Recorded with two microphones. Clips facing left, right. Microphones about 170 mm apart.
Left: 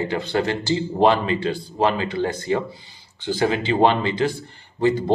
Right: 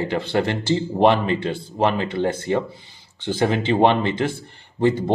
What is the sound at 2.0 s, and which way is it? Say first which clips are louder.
Speech: right 1 dB; 25° right (ahead or behind).